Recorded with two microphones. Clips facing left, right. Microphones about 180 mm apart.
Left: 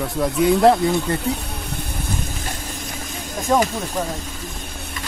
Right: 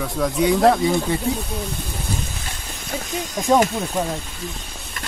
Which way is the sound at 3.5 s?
Centre (ahead or behind).